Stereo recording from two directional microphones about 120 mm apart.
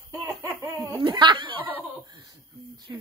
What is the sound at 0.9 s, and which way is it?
Snicker, 40° right (ahead or behind).